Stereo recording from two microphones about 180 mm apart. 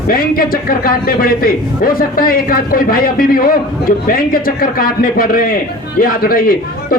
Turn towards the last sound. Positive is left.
turn(degrees=55)  # may be behind; listen again after turning